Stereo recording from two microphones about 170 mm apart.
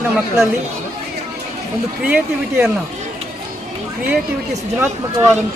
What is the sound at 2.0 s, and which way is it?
Speech, 5° right (ahead or behind).